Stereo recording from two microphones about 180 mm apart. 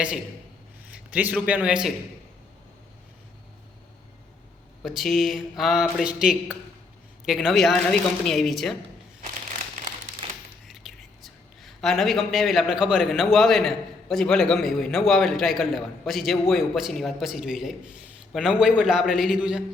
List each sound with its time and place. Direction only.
0.9 s a man's voice: 10° right (ahead or behind)
4.8 s speech: centre (ahead or behind)
9.2 s crumpling: 45° right (ahead or behind)
10.7 s speech: centre (ahead or behind)